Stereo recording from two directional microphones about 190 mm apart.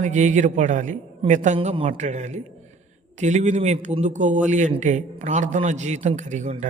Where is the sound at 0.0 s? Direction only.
40° right (ahead or behind).